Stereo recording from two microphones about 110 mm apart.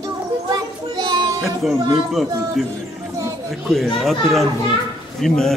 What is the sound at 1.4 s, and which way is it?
Music, centre (ahead or behind).